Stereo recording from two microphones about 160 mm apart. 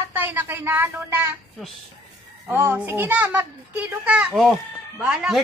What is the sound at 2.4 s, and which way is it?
Speech, 15° right (ahead or behind).